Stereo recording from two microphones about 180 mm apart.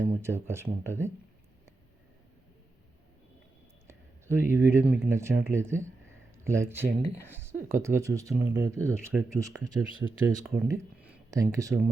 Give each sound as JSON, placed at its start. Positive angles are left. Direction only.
{"t": 0.0, "sound": "speech", "side_deg": -15}
{"t": 3.8, "sound": "speech", "side_deg": -15}
{"t": 10.2, "sound": "speech", "side_deg": -5}
{"t": 10.7, "sound": "speech", "side_deg": -15}